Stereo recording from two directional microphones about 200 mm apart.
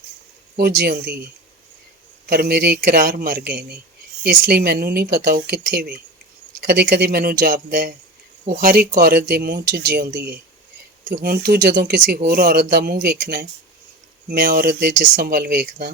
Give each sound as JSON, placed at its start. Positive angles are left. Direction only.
{"t": 0.8, "sound": "speech", "side_deg": -50}
{"t": 2.3, "sound": "speech", "side_deg": -50}